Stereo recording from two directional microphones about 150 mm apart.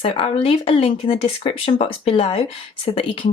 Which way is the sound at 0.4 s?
40° left (ahead or behind).